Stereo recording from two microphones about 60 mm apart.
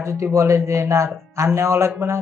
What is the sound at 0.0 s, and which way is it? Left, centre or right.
Speech, right.